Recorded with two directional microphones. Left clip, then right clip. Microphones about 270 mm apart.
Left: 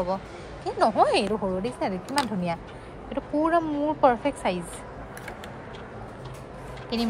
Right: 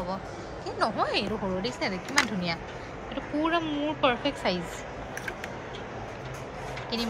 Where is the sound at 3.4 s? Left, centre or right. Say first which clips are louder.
Left 4 dB; centre.